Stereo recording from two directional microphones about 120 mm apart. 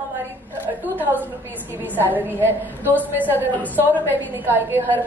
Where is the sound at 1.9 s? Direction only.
15° right (ahead or behind).